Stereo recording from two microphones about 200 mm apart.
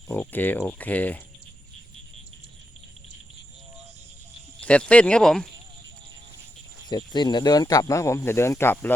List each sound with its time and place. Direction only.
0.1 s speech: 10° left (ahead or behind)
4.6 s speech: 5° left (ahead or behind)
6.8 s speech: 20° left (ahead or behind)